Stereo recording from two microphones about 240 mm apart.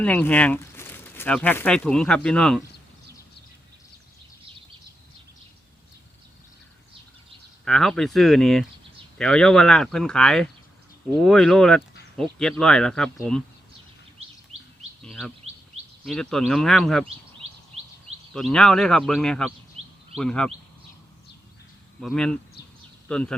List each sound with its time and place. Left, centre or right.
0.0 s speech: centre
7.6 s speech: centre
14.5 s chirp: right
15.0 s speech: centre
17.4 s bird vocalization: right
18.3 s speech: centre
22.0 s speech: centre